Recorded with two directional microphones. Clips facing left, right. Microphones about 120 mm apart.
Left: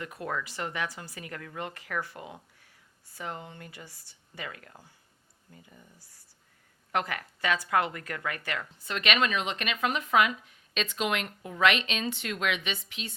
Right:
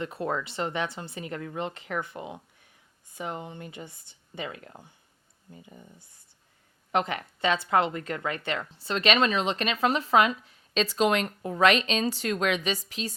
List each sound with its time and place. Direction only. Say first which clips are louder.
0.0 s speech: right 4 dB; 25° right (ahead or behind)